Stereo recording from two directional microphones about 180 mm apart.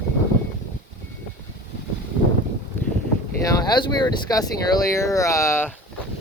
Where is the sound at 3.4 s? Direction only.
20° left (ahead or behind).